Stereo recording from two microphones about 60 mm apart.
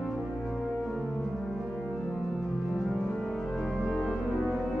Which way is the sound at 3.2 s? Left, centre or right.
Centre.